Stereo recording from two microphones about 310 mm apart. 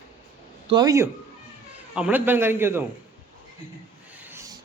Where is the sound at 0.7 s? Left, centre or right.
Centre.